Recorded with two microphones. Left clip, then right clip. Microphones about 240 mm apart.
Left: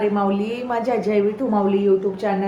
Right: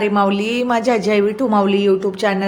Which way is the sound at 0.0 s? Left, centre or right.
Right.